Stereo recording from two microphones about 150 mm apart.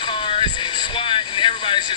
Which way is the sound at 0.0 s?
35° left (ahead or behind).